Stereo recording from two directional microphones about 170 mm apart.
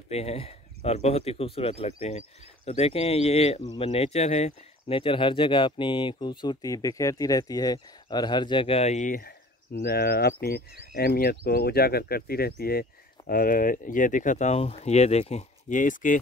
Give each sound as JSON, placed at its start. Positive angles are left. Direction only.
{"t": 0.1, "sound": "speech", "side_deg": 35}